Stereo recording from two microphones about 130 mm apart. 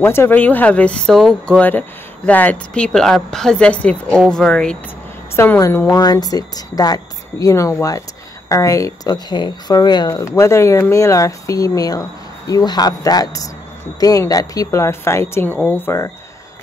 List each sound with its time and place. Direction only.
0.0 s speech: 20° left (ahead or behind)
5.3 s speech: 20° left (ahead or behind)